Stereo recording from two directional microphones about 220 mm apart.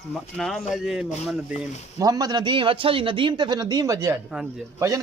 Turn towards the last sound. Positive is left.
turn(degrees=-15)  # may be behind; listen again after turning